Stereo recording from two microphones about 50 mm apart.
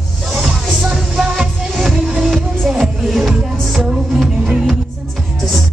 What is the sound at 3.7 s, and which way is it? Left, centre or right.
Music, centre.